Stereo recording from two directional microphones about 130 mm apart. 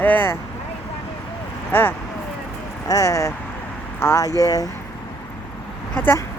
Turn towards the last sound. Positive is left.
turn(degrees=15)  # may be behind; listen again after turning